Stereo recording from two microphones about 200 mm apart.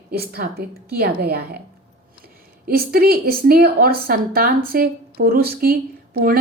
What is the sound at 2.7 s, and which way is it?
Speech, 50° right (ahead or behind).